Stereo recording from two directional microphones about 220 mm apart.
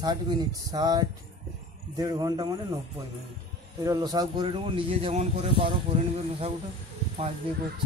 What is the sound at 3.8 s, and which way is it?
A man's voice, 15° right (ahead or behind).